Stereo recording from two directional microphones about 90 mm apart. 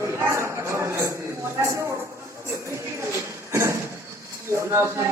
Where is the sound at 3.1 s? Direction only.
30° right (ahead or behind).